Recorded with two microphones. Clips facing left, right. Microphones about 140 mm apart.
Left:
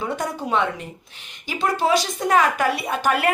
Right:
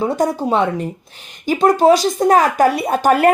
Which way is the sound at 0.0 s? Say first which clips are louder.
Right 9 dB; 35° right (ahead or behind).